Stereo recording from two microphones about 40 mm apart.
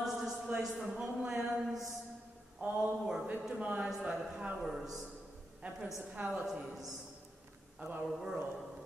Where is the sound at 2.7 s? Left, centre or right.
Centre.